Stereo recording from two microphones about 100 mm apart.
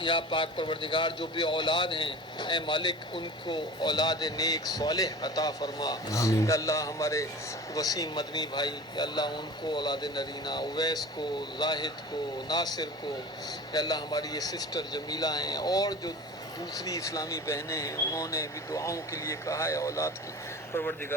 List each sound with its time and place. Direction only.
0.0 s a man's voice: 50° left (ahead or behind); by 21.2 s 25° left (ahead or behind)